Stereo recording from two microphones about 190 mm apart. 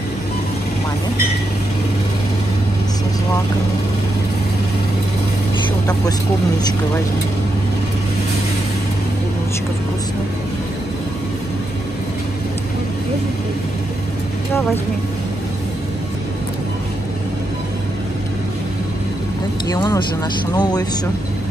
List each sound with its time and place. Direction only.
19.7 s speech: 20° left (ahead or behind)